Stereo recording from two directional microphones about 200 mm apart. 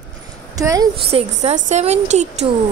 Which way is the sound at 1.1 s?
35° right (ahead or behind).